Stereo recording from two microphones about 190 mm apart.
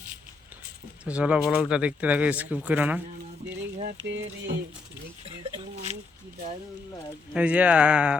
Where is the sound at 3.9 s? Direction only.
75° right (ahead or behind).